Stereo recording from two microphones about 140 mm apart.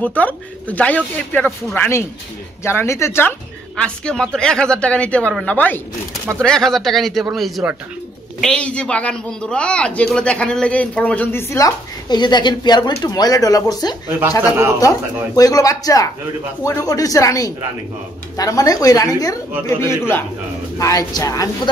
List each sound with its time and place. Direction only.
0.0 s a man's voice: 10° left (ahead or behind)